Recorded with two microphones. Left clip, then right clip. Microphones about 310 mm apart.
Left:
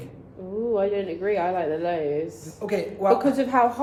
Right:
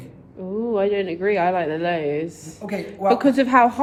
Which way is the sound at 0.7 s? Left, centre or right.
Right.